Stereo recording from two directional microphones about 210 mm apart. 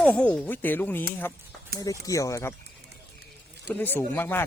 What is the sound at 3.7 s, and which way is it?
Speech, 10° left (ahead or behind).